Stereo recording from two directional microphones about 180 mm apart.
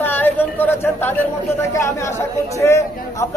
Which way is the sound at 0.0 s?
10° left (ahead or behind).